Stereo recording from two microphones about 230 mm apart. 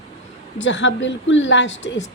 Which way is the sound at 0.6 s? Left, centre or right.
Left.